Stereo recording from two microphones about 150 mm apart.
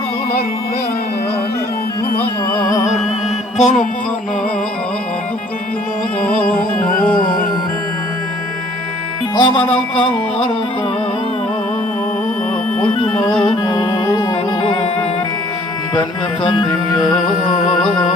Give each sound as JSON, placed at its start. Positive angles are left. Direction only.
{"t": 3.6, "sound": "music", "side_deg": 55}
{"t": 6.5, "sound": "music", "side_deg": 65}
{"t": 9.3, "sound": "speech", "side_deg": 30}
{"t": 12.9, "sound": "music", "side_deg": 35}